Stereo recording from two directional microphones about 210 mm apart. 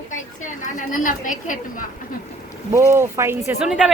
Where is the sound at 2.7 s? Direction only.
15° right (ahead or behind).